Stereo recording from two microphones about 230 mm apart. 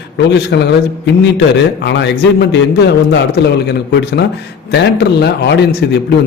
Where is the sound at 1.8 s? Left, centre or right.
Left.